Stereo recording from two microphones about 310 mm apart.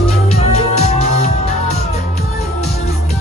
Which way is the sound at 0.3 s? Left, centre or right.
Left.